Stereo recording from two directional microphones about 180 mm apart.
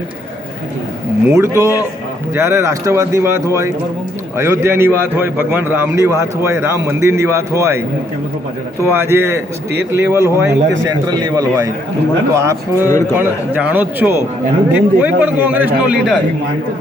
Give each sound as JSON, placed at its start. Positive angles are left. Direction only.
{"t": 1.3, "sound": "a man's voice", "side_deg": -15}
{"t": 8.8, "sound": "a man's voice", "side_deg": -15}